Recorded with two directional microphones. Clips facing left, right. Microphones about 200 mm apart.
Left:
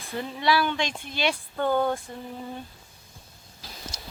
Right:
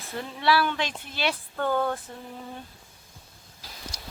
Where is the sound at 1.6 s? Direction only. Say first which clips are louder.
Left 2 dB; 15° left (ahead or behind).